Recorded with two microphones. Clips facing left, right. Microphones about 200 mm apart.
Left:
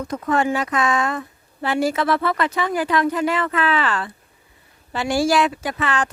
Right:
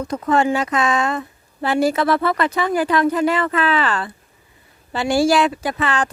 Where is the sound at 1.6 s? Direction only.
35° right (ahead or behind).